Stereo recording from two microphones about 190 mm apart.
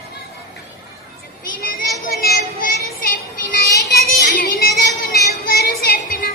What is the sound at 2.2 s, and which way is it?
Child singing, 55° left (ahead or behind).